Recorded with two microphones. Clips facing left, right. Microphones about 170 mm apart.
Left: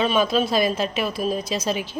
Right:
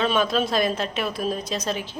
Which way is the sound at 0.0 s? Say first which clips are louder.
Left 2 dB; 5° left (ahead or behind).